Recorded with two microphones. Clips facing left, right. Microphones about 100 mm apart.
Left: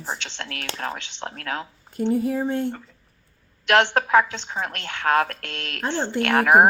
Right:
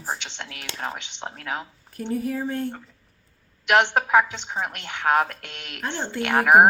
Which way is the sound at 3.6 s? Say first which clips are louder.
Left 1 dB; 15° right (ahead or behind).